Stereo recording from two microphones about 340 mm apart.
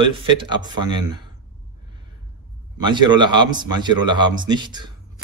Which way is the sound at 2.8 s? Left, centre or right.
Centre.